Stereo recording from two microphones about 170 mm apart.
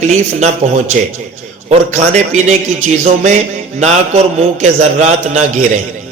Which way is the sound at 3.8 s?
40° right (ahead or behind).